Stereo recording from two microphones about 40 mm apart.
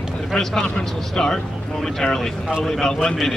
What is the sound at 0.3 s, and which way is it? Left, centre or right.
A man's voice, centre.